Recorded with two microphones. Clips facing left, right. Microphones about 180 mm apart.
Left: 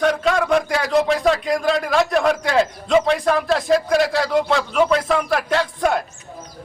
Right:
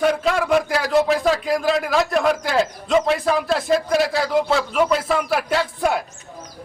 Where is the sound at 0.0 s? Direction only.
5° right (ahead or behind).